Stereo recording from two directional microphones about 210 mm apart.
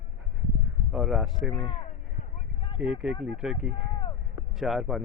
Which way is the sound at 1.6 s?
25° left (ahead or behind).